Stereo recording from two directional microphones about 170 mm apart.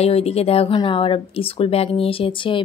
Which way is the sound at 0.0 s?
35° left (ahead or behind).